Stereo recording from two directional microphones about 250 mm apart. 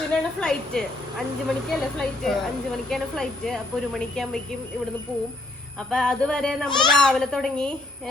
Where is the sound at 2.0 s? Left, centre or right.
Centre.